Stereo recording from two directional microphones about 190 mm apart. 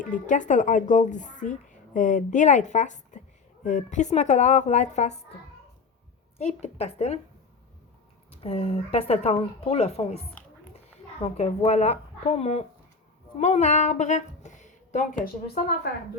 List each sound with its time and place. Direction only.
0.0 s speech: 40° left (ahead or behind)
6.4 s speech: 35° left (ahead or behind)
8.4 s speech: 30° left (ahead or behind)
11.2 s speech: 35° left (ahead or behind)